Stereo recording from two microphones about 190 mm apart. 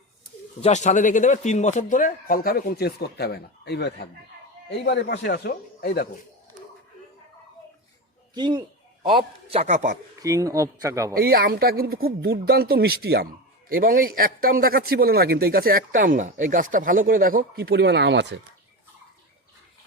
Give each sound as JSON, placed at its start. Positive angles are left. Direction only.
{"t": 0.6, "sound": "speech", "side_deg": 35}
{"t": 8.4, "sound": "a man's voice", "side_deg": -25}
{"t": 10.2, "sound": "speech", "side_deg": -15}
{"t": 11.1, "sound": "a man's voice", "side_deg": -50}